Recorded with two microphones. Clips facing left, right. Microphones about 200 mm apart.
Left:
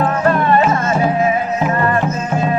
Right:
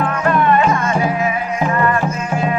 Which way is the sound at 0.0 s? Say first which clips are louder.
Left 1 dB; 35° left (ahead or behind).